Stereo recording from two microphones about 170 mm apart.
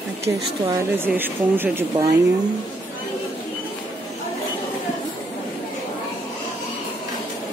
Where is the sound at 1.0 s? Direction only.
10° right (ahead or behind).